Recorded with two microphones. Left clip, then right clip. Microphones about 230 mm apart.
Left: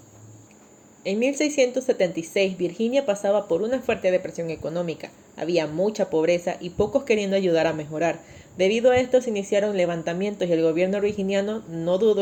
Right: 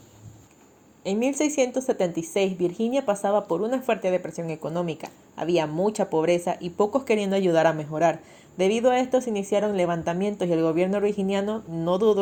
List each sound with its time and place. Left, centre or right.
1.0 s a woman's voice: right